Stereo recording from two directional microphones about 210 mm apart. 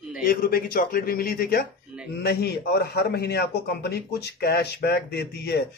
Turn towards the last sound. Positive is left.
turn(degrees=50)  # may be behind; listen again after turning